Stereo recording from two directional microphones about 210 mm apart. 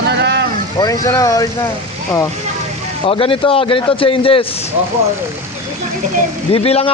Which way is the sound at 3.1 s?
25° left (ahead or behind).